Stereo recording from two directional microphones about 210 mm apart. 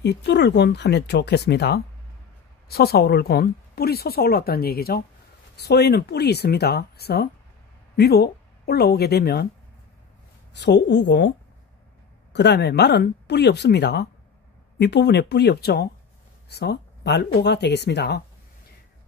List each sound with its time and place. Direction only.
0.0 s speech: 55° left (ahead or behind)
10.5 s speech: 55° left (ahead or behind)